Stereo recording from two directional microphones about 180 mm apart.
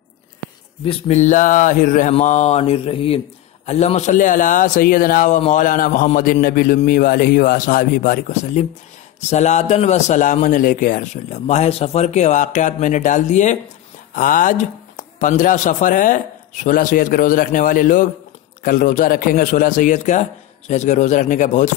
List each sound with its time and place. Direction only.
0.8 s a man's voice: 35° left (ahead or behind)